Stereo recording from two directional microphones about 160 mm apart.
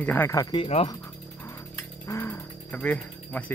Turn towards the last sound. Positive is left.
turn(degrees=10)  # may be behind; listen again after turning